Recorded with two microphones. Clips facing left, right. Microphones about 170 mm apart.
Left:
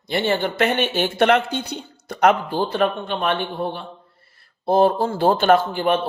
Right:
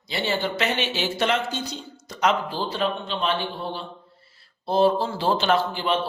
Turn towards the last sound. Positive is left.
turn(degrees=50)  # may be behind; listen again after turning